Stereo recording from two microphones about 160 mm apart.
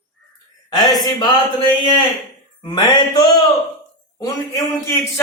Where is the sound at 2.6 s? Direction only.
30° left (ahead or behind).